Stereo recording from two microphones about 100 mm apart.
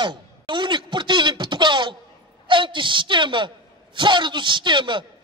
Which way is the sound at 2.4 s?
55° right (ahead or behind).